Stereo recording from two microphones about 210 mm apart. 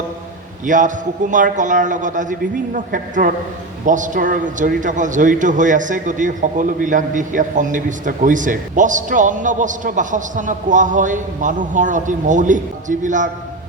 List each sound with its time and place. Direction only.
0.6 s a man's voice: 40° right (ahead or behind)